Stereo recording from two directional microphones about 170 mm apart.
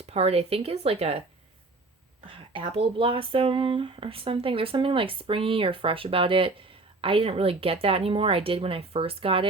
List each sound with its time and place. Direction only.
0.0 s speech: 35° right (ahead or behind)
2.3 s speech: 30° right (ahead or behind)